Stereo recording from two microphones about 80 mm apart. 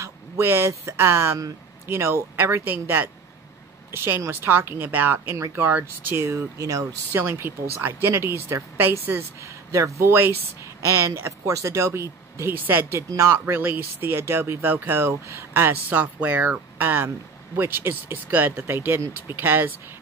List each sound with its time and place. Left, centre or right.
0.4 s speech: right
7.2 s speech: right
13.1 s speech: right
13.6 s speech: right